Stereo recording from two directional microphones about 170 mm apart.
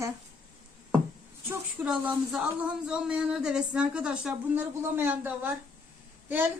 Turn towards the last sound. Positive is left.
turn(degrees=-10)  # may be behind; listen again after turning